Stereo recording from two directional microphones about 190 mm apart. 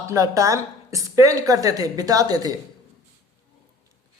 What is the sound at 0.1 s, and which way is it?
A woman's voice, 15° right (ahead or behind).